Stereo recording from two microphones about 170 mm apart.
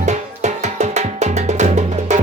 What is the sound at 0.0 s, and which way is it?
Music, 40° right (ahead or behind).